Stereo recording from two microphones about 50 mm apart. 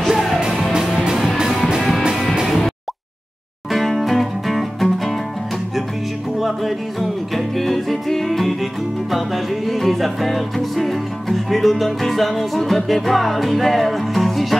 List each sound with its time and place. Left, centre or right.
0.1 s music: centre
0.4 s music: centre
3.7 s music: centre
6.4 s music: centre